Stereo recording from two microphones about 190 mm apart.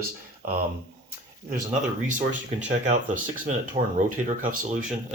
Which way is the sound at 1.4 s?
40° right (ahead or behind).